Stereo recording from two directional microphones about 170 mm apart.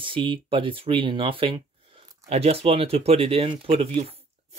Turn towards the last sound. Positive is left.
turn(degrees=-35)  # may be behind; listen again after turning